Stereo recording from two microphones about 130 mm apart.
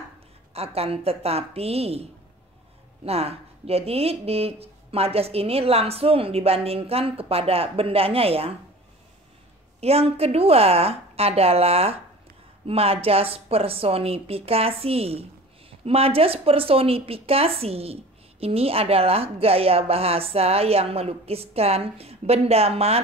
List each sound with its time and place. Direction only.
0.5 s speech: 50° right (ahead or behind)
3.1 s speech: 50° right (ahead or behind)
9.8 s speech: 50° right (ahead or behind)